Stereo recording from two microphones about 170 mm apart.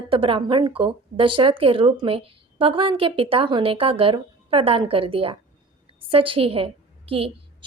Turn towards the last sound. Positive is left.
turn(degrees=-35)  # may be behind; listen again after turning